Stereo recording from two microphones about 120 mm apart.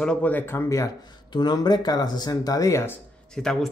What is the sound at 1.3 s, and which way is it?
Speech, 35° left (ahead or behind).